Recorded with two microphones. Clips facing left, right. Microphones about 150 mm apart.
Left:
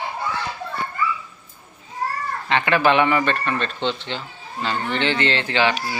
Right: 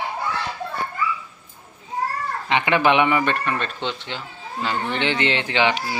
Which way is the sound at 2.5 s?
15° right (ahead or behind).